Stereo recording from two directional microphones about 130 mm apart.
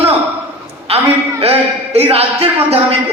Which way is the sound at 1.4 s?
50° right (ahead or behind).